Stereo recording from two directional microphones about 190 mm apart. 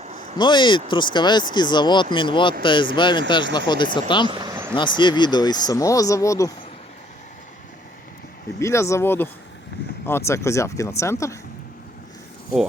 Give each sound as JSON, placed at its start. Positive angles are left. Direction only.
{"t": 0.3, "sound": "speech", "side_deg": 25}
{"t": 4.3, "sound": "vehicle", "side_deg": -20}
{"t": 4.7, "sound": "speech", "side_deg": 25}
{"t": 8.5, "sound": "speech", "side_deg": 15}